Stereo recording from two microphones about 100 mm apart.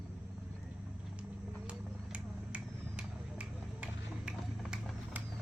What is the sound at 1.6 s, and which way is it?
Vehicle, 10° right (ahead or behind).